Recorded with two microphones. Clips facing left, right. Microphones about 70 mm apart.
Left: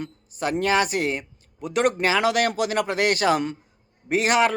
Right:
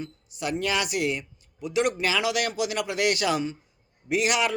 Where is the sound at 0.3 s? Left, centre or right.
Left.